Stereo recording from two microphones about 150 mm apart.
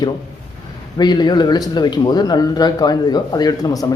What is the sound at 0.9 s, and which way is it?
Speech, 30° left (ahead or behind).